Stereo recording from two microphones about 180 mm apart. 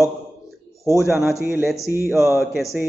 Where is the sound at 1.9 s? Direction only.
15° right (ahead or behind).